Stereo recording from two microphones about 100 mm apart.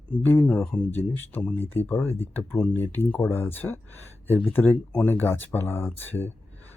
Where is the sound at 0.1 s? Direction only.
15° left (ahead or behind).